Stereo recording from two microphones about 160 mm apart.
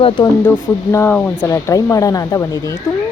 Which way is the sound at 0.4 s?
15° left (ahead or behind).